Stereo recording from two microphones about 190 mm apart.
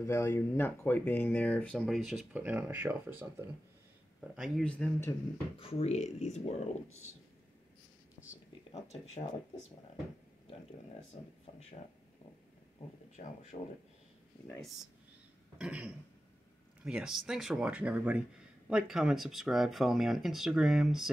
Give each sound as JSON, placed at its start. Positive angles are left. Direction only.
{"t": 0.0, "sound": "speech", "side_deg": 15}
{"t": 5.6, "sound": "speech", "side_deg": 30}
{"t": 11.1, "sound": "speech", "side_deg": 35}
{"t": 13.2, "sound": "speech", "side_deg": 40}
{"t": 15.5, "sound": "speech", "side_deg": -5}